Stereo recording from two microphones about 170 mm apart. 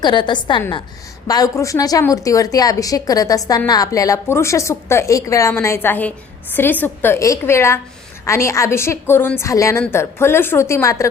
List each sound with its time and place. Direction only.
0.0 s a woman's voice: 25° left (ahead or behind)